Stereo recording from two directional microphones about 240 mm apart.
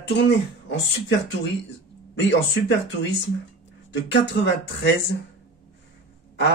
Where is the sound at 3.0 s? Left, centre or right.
Left.